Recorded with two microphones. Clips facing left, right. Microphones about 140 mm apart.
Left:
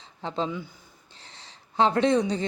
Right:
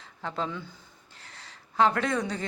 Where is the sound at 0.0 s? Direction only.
20° left (ahead or behind).